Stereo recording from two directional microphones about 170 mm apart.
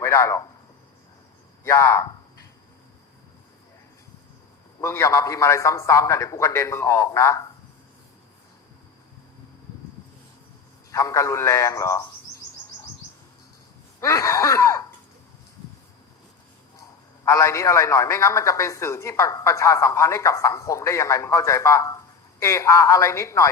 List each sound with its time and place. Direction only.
0.0 s a man's voice: 15° left (ahead or behind)
1.6 s a man's voice: 15° left (ahead or behind)
4.8 s a man's voice: 15° left (ahead or behind)
10.9 s a man's voice: 15° left (ahead or behind)
14.0 s a sound: 20° left (ahead or behind)
17.2 s a man's voice: 20° left (ahead or behind)